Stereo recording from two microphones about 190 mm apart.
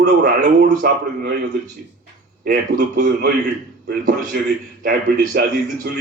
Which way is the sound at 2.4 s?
45° right (ahead or behind).